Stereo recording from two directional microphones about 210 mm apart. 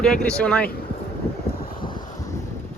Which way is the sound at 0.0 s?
5° left (ahead or behind).